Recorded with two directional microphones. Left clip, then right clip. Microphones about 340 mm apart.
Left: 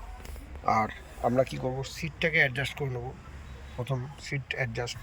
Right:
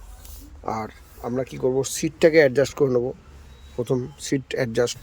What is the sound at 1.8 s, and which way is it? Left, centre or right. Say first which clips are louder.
Speech: right 14 dB; centre.